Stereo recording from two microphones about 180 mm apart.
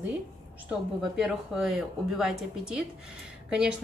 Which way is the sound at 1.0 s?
5° right (ahead or behind).